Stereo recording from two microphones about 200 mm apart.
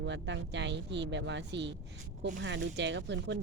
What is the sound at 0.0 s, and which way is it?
Speech, 65° right (ahead or behind).